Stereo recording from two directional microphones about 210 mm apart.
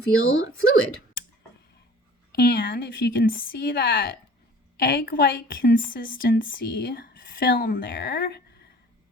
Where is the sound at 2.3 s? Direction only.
50° left (ahead or behind).